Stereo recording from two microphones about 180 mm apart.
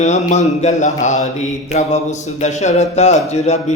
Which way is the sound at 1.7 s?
40° left (ahead or behind).